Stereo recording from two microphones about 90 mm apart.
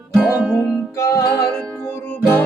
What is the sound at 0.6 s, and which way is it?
Music, 10° right (ahead or behind).